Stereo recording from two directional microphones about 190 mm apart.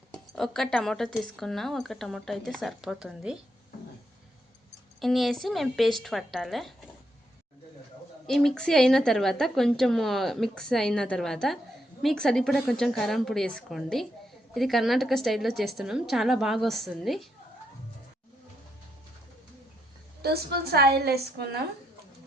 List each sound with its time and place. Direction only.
0.3 s a woman's voice: centre (ahead or behind)
4.9 s a woman's voice: centre (ahead or behind)
8.3 s a woman's voice: centre (ahead or behind)
20.2 s a woman's voice: 55° right (ahead or behind)